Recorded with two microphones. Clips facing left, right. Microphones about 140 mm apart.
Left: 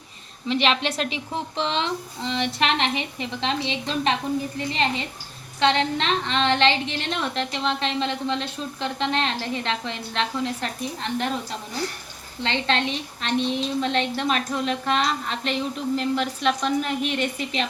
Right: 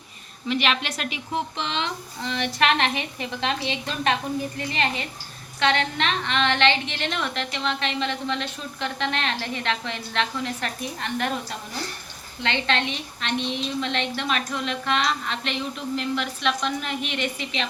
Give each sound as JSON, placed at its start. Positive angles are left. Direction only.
{"t": 0.4, "sound": "a woman's voice", "side_deg": 30}
{"t": 12.6, "sound": "a woman's voice", "side_deg": 35}